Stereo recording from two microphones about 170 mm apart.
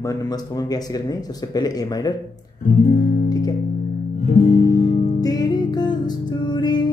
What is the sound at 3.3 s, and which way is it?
Music, 20° left (ahead or behind).